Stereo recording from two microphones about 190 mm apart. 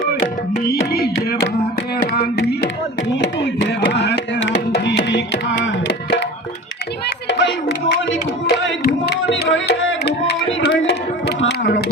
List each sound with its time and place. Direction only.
3.8 s music: 65° left (ahead or behind)
7.3 s music: 65° left (ahead or behind)
9.3 s tabla: 70° left (ahead or behind)